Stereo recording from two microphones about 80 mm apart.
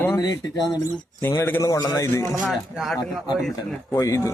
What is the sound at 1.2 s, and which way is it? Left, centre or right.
Speech, left.